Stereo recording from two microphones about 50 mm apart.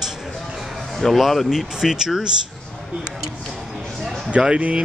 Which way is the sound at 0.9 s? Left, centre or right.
Centre.